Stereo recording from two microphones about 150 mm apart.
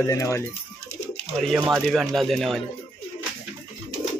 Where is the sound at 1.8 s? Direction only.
Centre (ahead or behind).